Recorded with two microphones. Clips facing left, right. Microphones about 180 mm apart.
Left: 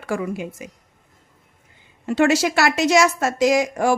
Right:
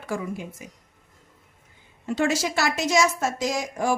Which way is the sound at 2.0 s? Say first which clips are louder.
Left 6 dB; 70° left (ahead or behind).